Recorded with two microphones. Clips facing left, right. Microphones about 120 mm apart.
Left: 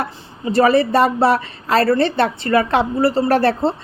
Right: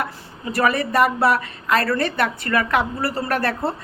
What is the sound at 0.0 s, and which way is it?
Speech, 30° left (ahead or behind).